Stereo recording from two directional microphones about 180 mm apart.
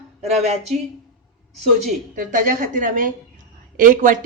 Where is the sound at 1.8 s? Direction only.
50° right (ahead or behind).